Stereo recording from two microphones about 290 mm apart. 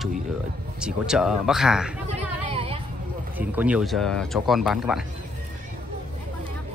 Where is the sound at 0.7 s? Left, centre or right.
Centre.